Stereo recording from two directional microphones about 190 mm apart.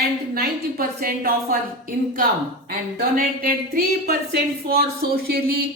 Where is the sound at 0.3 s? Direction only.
55° right (ahead or behind).